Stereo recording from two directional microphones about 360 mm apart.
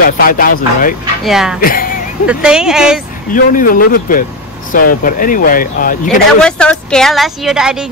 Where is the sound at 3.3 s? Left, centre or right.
Left.